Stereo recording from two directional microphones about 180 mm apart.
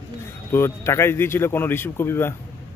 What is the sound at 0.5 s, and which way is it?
Speech, 15° left (ahead or behind).